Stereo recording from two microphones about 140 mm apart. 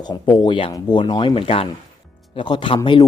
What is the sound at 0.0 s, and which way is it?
Speech, 30° left (ahead or behind).